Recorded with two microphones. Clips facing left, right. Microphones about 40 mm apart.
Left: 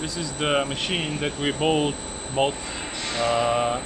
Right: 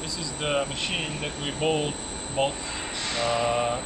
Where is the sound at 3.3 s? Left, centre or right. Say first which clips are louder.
Left 3 dB; left.